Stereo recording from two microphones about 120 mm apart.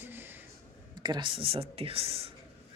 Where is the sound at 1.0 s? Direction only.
40° right (ahead or behind).